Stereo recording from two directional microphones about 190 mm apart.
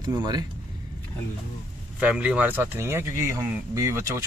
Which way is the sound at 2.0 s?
5° right (ahead or behind).